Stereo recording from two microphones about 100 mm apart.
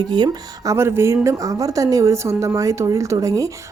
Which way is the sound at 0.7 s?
25° right (ahead or behind).